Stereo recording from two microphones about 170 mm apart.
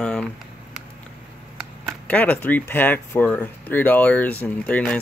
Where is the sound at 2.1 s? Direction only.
10° left (ahead or behind).